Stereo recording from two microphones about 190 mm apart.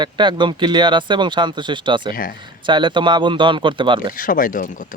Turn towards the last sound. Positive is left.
turn(degrees=45)  # may be behind; listen again after turning